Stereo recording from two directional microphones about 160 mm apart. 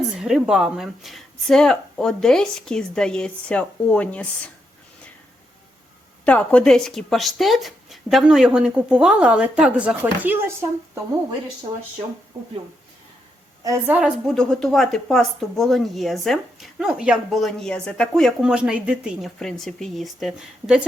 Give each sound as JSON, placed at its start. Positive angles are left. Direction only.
{"t": 0.2, "sound": "speech", "side_deg": -5}
{"t": 6.2, "sound": "speech", "side_deg": 10}
{"t": 11.7, "sound": "speech", "side_deg": -35}
{"t": 13.7, "sound": "a woman's voice", "side_deg": -10}
{"t": 14.3, "sound": "speech", "side_deg": 5}